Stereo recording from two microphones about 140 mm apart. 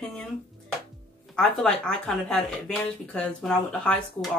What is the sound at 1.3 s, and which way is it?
Speech, 5° left (ahead or behind).